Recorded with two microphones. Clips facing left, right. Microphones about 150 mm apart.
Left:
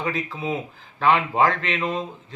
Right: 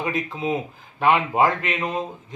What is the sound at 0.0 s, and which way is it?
A man's voice, 20° right (ahead or behind).